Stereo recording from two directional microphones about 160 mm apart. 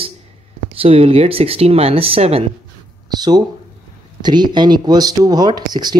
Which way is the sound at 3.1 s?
25° right (ahead or behind).